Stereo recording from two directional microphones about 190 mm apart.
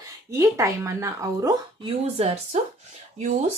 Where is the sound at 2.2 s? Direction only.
35° right (ahead or behind).